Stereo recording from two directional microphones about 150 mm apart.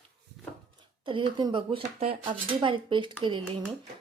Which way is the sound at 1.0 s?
35° right (ahead or behind).